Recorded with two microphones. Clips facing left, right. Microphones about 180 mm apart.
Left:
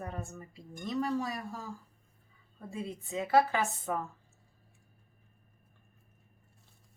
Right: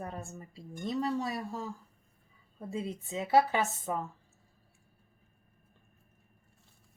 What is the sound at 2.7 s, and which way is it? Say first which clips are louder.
A woman's voice: right 2 dB; 20° right (ahead or behind).